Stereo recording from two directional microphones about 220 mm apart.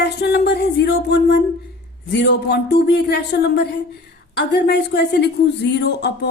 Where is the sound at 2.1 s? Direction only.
50° left (ahead or behind).